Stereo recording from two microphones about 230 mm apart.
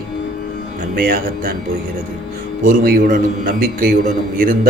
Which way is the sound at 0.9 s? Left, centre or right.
Right.